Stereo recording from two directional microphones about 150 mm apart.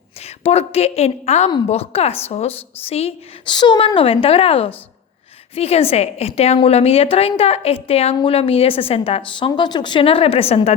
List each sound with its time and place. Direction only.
0.2 s a woman's voice: 45° left (ahead or behind)